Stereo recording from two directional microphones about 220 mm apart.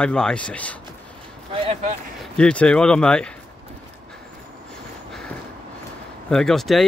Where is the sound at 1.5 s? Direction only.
25° right (ahead or behind).